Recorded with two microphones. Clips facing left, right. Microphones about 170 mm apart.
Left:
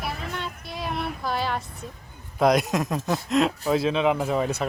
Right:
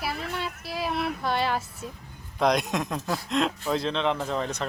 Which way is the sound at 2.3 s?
5° left (ahead or behind).